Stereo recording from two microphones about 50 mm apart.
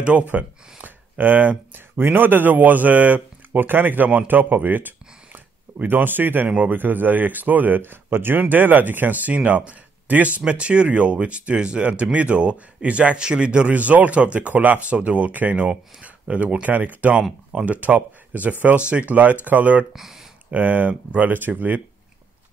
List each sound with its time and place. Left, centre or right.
0.0 s speech: right
17.2 s speech: centre
17.6 s speech: right
19.9 s speech: centre
20.5 s speech: right